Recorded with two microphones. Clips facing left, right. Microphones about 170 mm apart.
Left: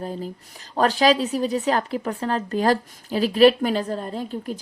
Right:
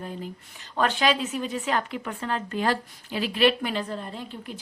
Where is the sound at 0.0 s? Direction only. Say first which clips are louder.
Left 5 dB; 35° left (ahead or behind).